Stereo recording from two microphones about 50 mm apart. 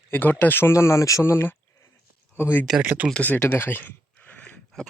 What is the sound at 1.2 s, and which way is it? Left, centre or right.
Speech, left.